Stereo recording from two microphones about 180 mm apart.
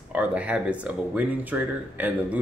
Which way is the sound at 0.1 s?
5° right (ahead or behind).